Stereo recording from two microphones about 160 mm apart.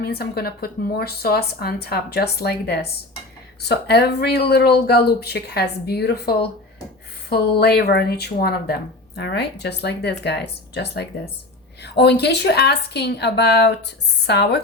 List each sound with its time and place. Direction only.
0.0 s speech: 80° left